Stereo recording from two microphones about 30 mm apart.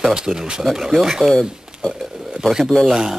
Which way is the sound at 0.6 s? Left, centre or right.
Centre.